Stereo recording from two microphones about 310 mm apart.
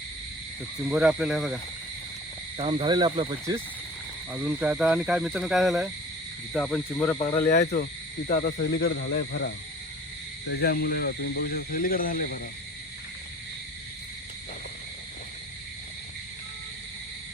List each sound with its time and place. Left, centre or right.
0.9 s speech: centre
2.6 s speech: centre
7.4 s speech: left